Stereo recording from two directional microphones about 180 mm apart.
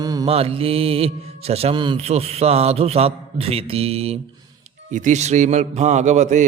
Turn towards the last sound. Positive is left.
turn(degrees=-40)  # may be behind; listen again after turning